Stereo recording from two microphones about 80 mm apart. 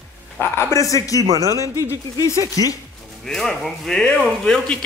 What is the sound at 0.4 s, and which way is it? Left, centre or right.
Speech, left.